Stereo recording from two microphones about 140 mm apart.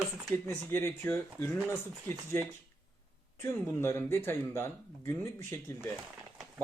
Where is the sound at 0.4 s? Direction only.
15° left (ahead or behind).